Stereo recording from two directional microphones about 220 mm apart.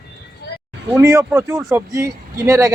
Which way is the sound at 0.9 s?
10° right (ahead or behind).